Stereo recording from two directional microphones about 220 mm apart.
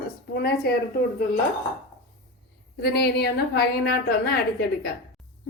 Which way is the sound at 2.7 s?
50° left (ahead or behind).